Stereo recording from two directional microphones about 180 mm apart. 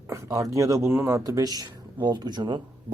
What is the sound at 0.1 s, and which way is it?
Speech, 20° right (ahead or behind).